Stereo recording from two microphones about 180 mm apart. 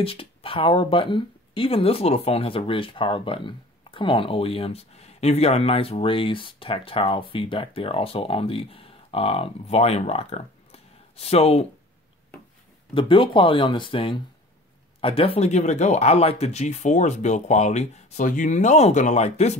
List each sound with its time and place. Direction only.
0.0 s speech: 30° left (ahead or behind)
12.9 s speech: 30° left (ahead or behind)